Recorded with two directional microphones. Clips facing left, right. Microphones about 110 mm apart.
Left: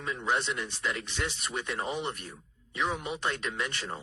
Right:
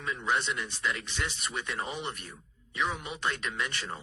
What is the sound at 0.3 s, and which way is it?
Speech, 35° left (ahead or behind).